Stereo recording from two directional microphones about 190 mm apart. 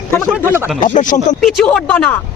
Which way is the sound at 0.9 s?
45° left (ahead or behind).